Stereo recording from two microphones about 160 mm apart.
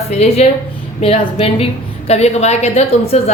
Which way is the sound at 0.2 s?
40° left (ahead or behind).